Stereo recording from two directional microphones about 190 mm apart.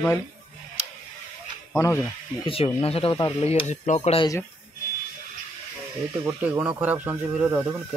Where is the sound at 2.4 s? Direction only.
30° left (ahead or behind).